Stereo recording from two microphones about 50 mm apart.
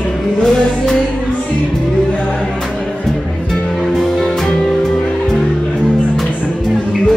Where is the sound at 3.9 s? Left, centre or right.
Centre.